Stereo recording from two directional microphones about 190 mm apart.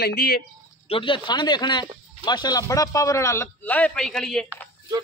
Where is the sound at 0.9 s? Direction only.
25° left (ahead or behind); by 4.5 s 5° left (ahead or behind).